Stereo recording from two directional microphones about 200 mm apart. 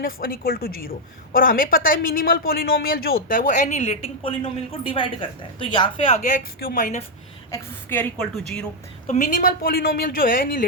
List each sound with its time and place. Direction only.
0.0 s a woman's voice: 45° left (ahead or behind); by 6.3 s 30° left (ahead or behind)
6.6 s a woman's voice: 45° left (ahead or behind)
7.5 s a woman's voice: 10° left (ahead or behind)
9.0 s a woman's voice: 40° left (ahead or behind)